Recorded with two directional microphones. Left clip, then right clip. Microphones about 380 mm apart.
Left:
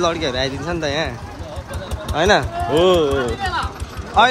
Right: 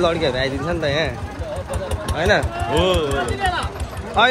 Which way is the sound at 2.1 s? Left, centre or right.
Centre.